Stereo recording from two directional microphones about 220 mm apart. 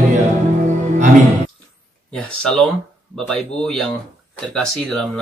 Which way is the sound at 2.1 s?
5° left (ahead or behind).